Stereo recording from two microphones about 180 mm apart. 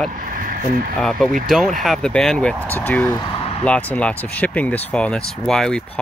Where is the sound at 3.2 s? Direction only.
35° left (ahead or behind).